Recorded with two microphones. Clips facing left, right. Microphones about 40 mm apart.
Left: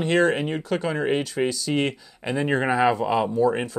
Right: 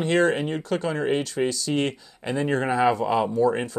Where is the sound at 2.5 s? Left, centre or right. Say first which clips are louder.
Left 2 dB; centre.